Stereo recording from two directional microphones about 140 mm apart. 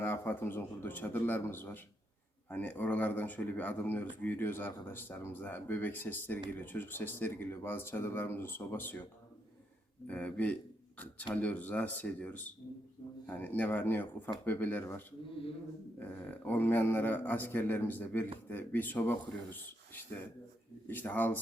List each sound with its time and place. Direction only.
0.0 s speech: 15° left (ahead or behind)
10.1 s speech: 10° left (ahead or behind)
15.3 s speech: 40° left (ahead or behind)
16.0 s speech: 10° left (ahead or behind)